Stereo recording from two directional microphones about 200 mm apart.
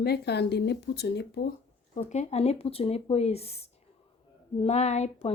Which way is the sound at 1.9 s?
35° left (ahead or behind).